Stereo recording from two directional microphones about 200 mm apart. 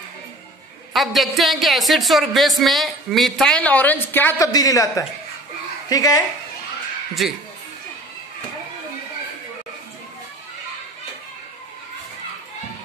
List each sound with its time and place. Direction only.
0.9 s speech: centre (ahead or behind); by 6.2 s 15° left (ahead or behind)
7.2 s speech: centre (ahead or behind)